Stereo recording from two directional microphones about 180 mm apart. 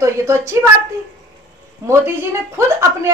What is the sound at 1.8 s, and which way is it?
A woman's voice, 15° right (ahead or behind).